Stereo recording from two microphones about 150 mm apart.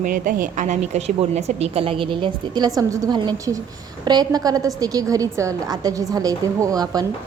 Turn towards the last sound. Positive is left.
turn(degrees=-25)  # may be behind; listen again after turning